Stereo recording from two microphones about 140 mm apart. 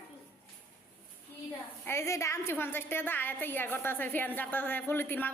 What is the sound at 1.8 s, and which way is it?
A woman's voice, 20° left (ahead or behind).